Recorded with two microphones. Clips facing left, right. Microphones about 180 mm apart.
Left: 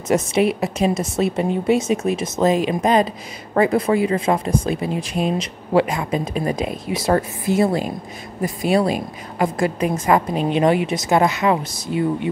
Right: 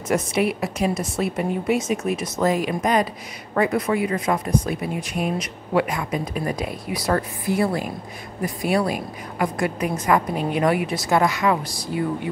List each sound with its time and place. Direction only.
0.1 s speech: 25° left (ahead or behind)